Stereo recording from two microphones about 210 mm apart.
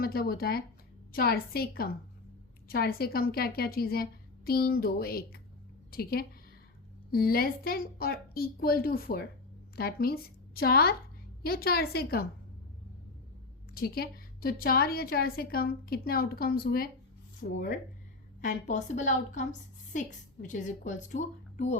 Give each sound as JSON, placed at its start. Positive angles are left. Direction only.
{"t": 0.0, "sound": "a woman's voice", "side_deg": 45}
{"t": 13.7, "sound": "a woman's voice", "side_deg": 45}